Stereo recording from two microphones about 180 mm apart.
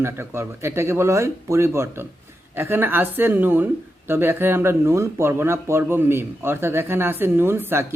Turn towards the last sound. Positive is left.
turn(degrees=-10)  # may be behind; listen again after turning